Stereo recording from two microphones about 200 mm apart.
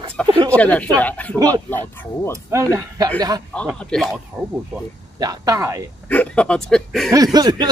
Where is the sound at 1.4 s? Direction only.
20° right (ahead or behind).